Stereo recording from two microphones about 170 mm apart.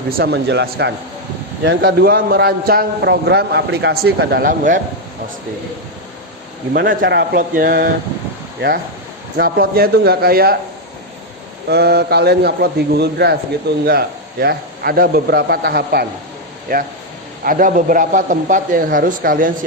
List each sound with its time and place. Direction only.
0.2 s a man's voice: 75° right (ahead or behind); by 4.8 s 50° right (ahead or behind)
6.7 s a man's voice: 70° right (ahead or behind)
9.4 s a man's voice: 60° right (ahead or behind)
11.7 s a man's voice: 70° right (ahead or behind)
16.7 s a man's voice: 55° right (ahead or behind)